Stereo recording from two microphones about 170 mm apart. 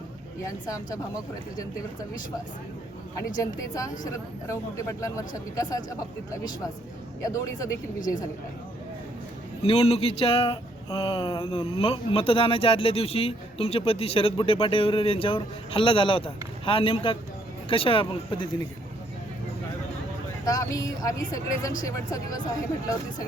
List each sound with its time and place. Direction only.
0.4 s speech: 20° left (ahead or behind)
3.2 s speech: 20° left (ahead or behind)
7.9 s a woman's voice: 50° left (ahead or behind)
9.6 s speech: 35° left (ahead or behind)
20.4 s speech: 20° left (ahead or behind)